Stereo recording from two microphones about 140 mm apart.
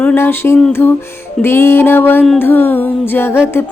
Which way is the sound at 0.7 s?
15° left (ahead or behind).